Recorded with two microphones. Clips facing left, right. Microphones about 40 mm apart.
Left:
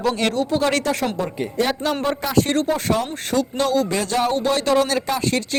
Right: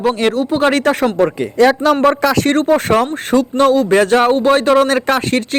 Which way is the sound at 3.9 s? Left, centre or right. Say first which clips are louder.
Right 10 dB; right.